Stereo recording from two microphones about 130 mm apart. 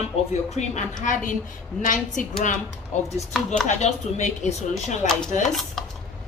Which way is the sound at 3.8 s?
60° left (ahead or behind).